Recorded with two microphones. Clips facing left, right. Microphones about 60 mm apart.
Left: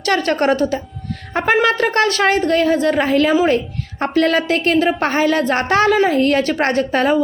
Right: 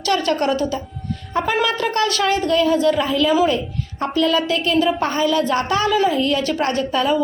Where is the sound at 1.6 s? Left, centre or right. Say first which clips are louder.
Left 4 dB; left.